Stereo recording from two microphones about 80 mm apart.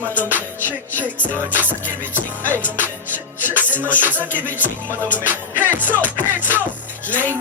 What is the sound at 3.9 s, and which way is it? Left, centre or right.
Music, right.